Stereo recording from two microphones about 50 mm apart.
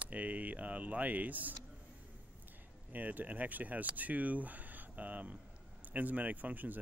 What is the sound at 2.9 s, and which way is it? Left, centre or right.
Speech, right.